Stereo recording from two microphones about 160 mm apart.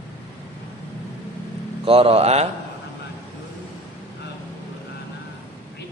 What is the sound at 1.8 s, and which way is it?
Speech, 35° right (ahead or behind).